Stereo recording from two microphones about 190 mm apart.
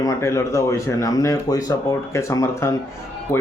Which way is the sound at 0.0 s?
15° left (ahead or behind).